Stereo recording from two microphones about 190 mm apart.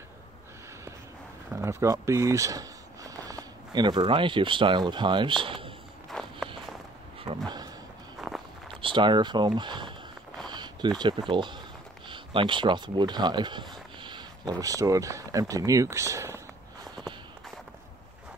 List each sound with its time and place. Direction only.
1.5 s speech: 15° right (ahead or behind)
6.0 s walk: centre (ahead or behind)
7.2 s a sound: 20° right (ahead or behind)
8.6 s speech: 25° right (ahead or behind)